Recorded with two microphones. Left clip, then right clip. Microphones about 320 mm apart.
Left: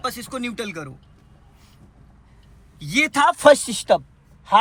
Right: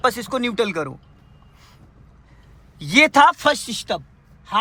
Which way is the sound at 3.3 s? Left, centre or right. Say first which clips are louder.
Left 6 dB; centre.